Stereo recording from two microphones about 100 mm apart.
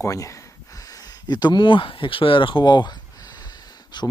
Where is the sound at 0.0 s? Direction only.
30° left (ahead or behind).